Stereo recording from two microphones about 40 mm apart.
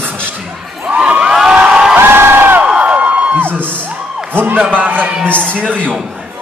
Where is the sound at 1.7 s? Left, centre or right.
Centre.